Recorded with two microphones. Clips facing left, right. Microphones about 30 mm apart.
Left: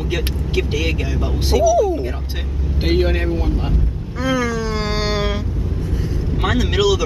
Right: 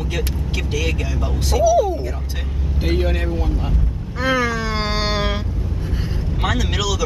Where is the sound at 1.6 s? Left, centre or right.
Centre.